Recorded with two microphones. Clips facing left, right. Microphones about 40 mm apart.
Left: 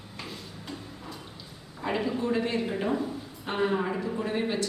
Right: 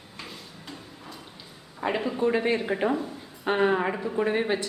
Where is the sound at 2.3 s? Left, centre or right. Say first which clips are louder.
Right 3 dB; right.